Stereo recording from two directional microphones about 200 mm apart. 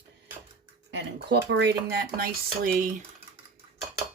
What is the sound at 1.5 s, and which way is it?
Speech, 55° right (ahead or behind).